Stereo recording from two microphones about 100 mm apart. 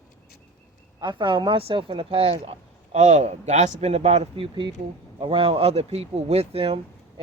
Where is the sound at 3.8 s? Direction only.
90° right.